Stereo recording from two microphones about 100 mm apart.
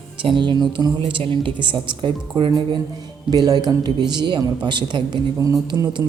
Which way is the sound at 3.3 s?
40° right (ahead or behind).